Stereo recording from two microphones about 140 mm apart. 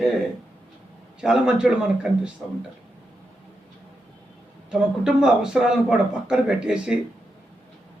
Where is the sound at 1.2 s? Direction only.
5° right (ahead or behind).